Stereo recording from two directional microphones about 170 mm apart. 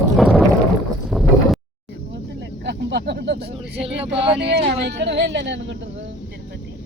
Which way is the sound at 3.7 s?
35° right (ahead or behind).